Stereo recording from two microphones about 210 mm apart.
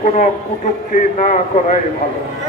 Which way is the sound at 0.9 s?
35° left (ahead or behind).